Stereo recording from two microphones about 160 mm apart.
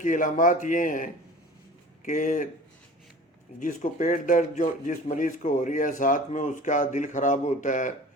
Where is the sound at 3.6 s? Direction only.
55° left (ahead or behind).